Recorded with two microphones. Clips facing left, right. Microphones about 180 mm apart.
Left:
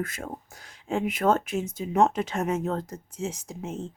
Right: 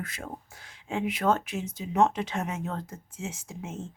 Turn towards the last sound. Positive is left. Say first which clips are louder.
# left 4 dB
turn(degrees=35)  # may be behind; listen again after turning